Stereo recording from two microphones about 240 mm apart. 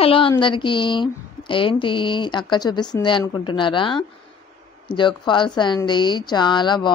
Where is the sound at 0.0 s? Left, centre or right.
Left.